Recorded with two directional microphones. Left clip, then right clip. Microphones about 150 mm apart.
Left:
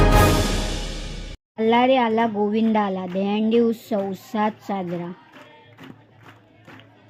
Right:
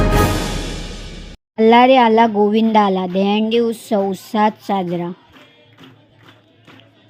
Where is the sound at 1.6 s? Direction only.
30° right (ahead or behind).